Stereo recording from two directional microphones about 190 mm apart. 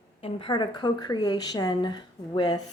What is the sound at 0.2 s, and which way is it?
Speech, 30° left (ahead or behind).